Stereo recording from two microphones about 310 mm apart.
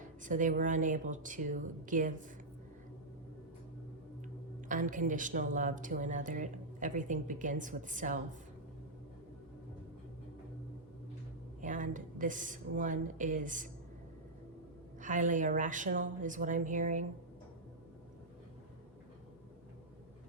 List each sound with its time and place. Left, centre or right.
0.2 s speech: right
4.7 s speech: right
11.6 s a woman's voice: right
15.0 s speech: right